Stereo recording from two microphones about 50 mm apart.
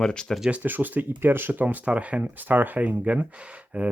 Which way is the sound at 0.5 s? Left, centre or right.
Right.